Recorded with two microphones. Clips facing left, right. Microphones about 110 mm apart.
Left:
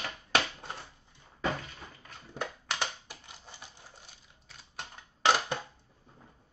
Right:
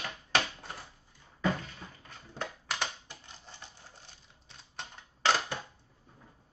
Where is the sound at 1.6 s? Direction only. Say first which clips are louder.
Even; 5° left (ahead or behind).